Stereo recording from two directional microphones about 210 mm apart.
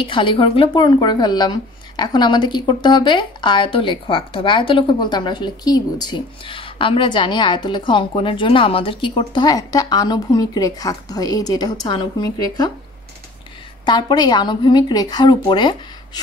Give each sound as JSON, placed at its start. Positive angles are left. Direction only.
{"t": 0.0, "sound": "speech", "side_deg": 25}
{"t": 13.8, "sound": "speech", "side_deg": 20}